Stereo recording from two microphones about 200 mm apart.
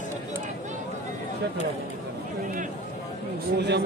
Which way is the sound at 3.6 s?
60° right (ahead or behind).